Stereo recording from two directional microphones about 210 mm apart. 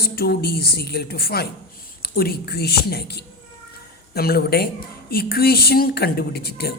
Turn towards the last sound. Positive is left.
turn(degrees=45)  # may be behind; listen again after turning